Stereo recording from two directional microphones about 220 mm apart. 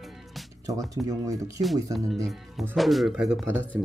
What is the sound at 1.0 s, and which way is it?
Speech, 15° right (ahead or behind).